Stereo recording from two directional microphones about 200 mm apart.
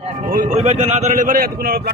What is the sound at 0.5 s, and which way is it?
A man's voice, 35° right (ahead or behind).